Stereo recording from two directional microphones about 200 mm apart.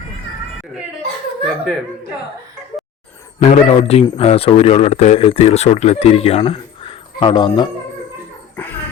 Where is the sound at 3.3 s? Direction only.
35° left (ahead or behind).